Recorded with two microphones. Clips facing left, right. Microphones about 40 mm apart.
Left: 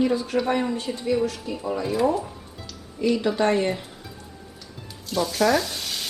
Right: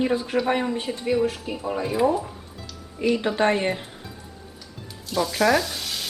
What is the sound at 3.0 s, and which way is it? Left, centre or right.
Speech, right.